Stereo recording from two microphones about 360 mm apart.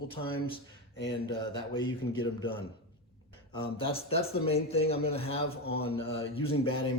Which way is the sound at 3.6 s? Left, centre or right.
Centre.